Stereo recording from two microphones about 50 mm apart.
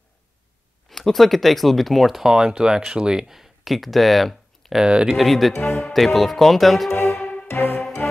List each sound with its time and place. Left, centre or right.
0.8 s speech: centre
4.7 s speech: centre
5.1 s speech: centre
5.7 s speech: left
5.9 s speech: centre
6.9 s music: left
8.0 s music: left